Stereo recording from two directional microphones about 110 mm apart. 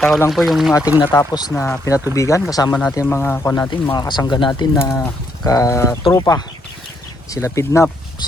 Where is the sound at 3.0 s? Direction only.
20° left (ahead or behind).